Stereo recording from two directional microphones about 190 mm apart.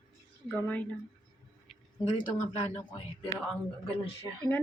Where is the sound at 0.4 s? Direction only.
5° left (ahead or behind).